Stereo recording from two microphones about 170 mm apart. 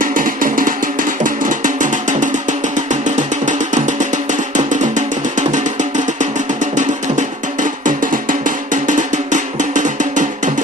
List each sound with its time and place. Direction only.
0.0 s music: 55° right (ahead or behind)